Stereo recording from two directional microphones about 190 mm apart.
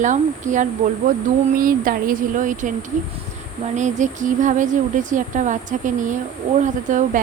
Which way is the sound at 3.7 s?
40° right (ahead or behind).